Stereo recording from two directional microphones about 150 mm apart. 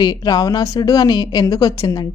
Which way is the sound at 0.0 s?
25° left (ahead or behind).